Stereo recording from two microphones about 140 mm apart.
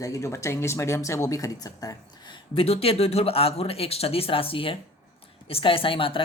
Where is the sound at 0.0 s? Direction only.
20° left (ahead or behind).